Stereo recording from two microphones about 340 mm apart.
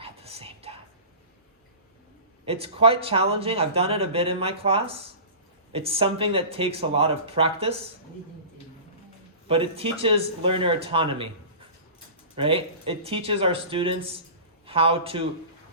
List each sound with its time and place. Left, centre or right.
0.0 s whispering: centre
2.5 s speech: centre
9.5 s speech: centre
12.4 s speech: centre